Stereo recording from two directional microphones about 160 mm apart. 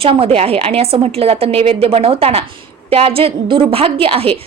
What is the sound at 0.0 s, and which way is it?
A woman's voice, 35° right (ahead or behind).